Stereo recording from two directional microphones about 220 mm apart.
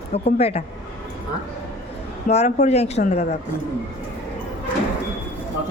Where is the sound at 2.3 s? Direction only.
30° left (ahead or behind).